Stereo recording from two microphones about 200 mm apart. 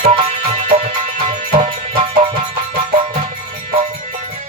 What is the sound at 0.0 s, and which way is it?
Music, 30° right (ahead or behind).